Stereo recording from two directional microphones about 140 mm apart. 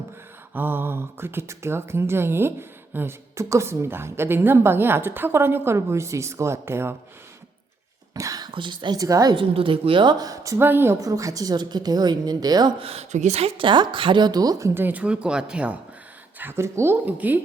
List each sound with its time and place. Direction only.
0.5 s speech: 15° right (ahead or behind)
8.1 s a woman's voice: 25° right (ahead or behind)
12.8 s a woman's voice: 50° right (ahead or behind); by 17.4 s 10° right (ahead or behind)